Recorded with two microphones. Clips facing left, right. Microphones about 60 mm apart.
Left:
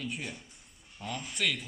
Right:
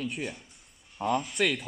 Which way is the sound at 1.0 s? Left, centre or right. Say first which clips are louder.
Right 11 dB; right.